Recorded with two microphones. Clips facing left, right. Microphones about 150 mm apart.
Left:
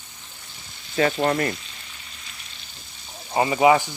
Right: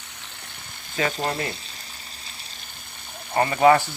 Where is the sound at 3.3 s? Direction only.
10° left (ahead or behind).